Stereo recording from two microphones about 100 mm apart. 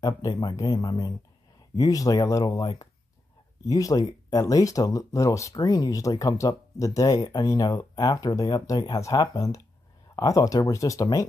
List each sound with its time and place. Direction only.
0.0 s speech: 45° left (ahead or behind)
3.6 s speech: 35° left (ahead or behind)